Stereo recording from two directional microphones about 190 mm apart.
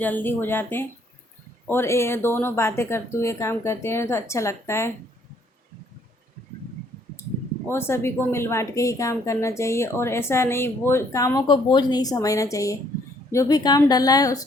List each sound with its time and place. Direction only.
0.0 s a woman's voice: 10° left (ahead or behind)
7.7 s a woman's voice: 10° left (ahead or behind)